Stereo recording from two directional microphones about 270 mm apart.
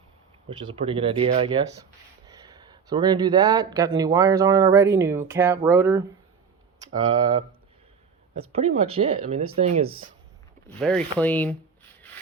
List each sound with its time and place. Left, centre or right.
0.5 s speech: centre
7.2 s speech: centre
10.8 s rub: centre